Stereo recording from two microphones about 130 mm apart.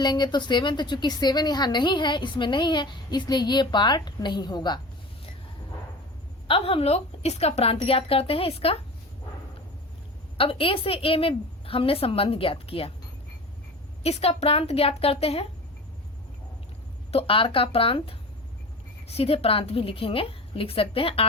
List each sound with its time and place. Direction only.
0.0 s a woman's voice: 35° left (ahead or behind)
6.5 s a woman's voice: 45° left (ahead or behind)
10.3 s a woman's voice: 45° left (ahead or behind)
14.0 s a woman's voice: 50° left (ahead or behind)
17.1 s a woman's voice: 45° left (ahead or behind)